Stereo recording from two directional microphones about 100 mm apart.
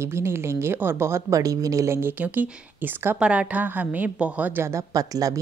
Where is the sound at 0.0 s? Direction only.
25° right (ahead or behind).